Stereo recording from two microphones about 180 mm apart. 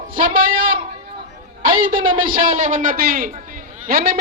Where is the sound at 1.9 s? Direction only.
50° right (ahead or behind).